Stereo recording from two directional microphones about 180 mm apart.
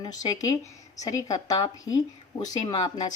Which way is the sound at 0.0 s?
20° left (ahead or behind).